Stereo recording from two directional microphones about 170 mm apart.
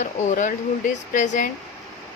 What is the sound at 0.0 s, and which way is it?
A woman's voice, 50° left (ahead or behind).